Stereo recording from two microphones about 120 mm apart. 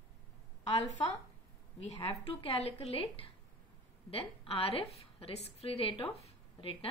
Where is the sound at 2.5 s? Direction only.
55° left (ahead or behind).